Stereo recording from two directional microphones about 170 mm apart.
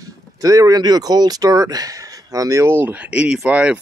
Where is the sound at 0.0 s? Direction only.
20° right (ahead or behind).